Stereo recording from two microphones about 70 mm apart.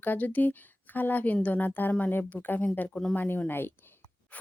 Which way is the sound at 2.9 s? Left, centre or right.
Centre.